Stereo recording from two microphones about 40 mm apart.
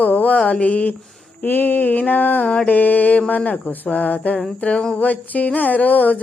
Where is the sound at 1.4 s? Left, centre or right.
Left.